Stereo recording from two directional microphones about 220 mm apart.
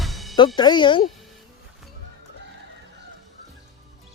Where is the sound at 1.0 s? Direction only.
Centre (ahead or behind).